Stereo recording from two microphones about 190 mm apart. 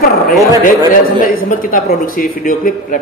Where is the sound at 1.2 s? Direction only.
45° left (ahead or behind).